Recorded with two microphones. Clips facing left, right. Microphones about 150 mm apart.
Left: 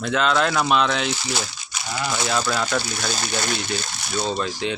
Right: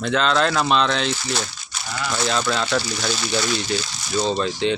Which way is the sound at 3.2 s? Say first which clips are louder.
Right 3 dB; 50° left (ahead or behind).